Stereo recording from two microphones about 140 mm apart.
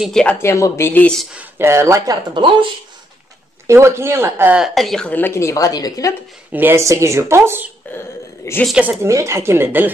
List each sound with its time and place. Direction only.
0.0 s speech: 5° left (ahead or behind)
0.4 s speech: 20° left (ahead or behind)
1.3 s speech: 15° right (ahead or behind)
2.3 s speech: 35° right (ahead or behind)
3.6 s speech: 20° right (ahead or behind)
4.6 s speech: centre (ahead or behind); by 6.1 s 25° left (ahead or behind)
6.5 s speech: 15° right (ahead or behind)
7.8 s a sound: 10° left (ahead or behind)
8.6 s speech: 5° right (ahead or behind)
9.0 s speech: 20° right (ahead or behind)